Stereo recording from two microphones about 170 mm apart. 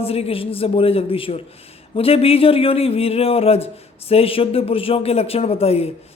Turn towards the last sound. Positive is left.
turn(degrees=35)  # may be behind; listen again after turning